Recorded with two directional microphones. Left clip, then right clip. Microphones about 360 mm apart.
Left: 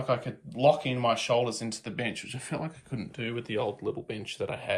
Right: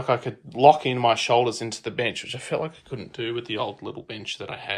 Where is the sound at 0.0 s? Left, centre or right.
Centre.